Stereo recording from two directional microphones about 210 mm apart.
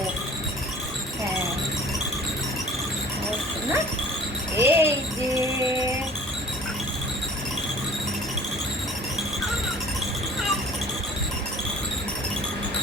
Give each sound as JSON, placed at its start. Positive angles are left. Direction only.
{"t": 4.5, "sound": "jingle bell", "side_deg": -10}